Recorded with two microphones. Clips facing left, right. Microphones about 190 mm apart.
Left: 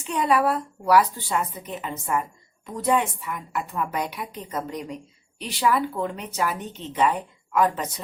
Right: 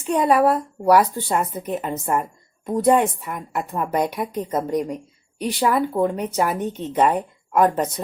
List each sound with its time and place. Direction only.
0.0 s speech: 45° right (ahead or behind)